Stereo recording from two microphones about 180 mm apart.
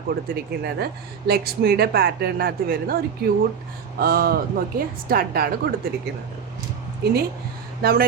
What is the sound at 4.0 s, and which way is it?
Speech, 55° right (ahead or behind).